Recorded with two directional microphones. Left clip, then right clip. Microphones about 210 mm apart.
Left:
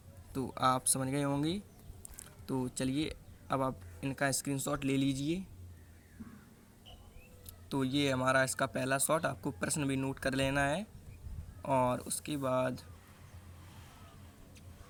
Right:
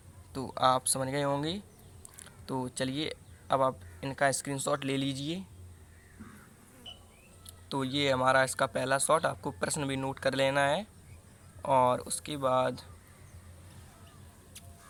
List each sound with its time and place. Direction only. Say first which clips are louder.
0.3 s speech: right 4 dB; 25° left (ahead or behind)
7.4 s speech: right 2 dB; 25° left (ahead or behind)